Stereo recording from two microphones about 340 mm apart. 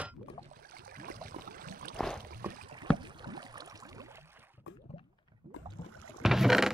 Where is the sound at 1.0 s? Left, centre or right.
Right.